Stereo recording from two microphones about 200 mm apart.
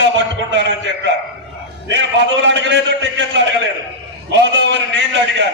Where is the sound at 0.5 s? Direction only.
60° right (ahead or behind).